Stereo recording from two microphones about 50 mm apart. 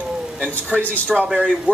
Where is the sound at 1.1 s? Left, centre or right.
Centre.